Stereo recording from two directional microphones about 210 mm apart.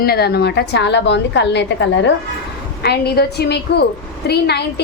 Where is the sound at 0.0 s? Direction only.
50° left (ahead or behind).